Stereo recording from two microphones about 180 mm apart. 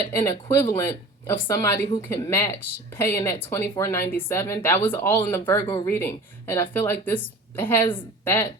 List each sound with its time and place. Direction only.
0.0 s speech: 15° left (ahead or behind)